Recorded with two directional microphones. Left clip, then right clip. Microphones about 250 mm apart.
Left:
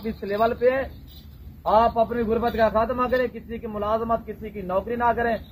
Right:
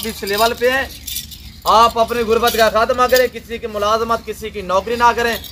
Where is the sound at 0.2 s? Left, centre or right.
Left.